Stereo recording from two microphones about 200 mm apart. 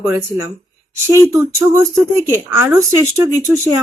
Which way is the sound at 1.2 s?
10° right (ahead or behind).